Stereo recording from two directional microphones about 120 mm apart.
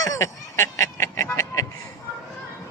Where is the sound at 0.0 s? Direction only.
25° left (ahead or behind).